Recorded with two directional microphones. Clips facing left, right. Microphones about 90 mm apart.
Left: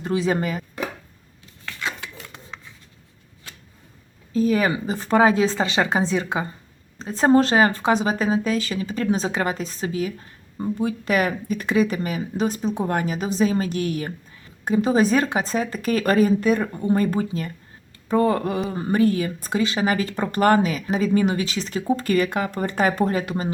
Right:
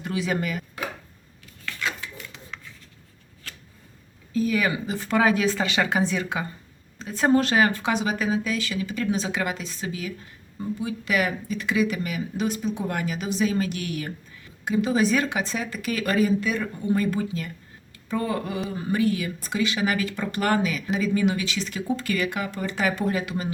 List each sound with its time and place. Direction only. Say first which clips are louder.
0.0 s speech: left 5 dB; 30° left (ahead or behind)
4.4 s speech: left 4 dB; 35° left (ahead or behind)